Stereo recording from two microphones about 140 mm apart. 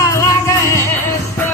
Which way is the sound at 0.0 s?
20° left (ahead or behind).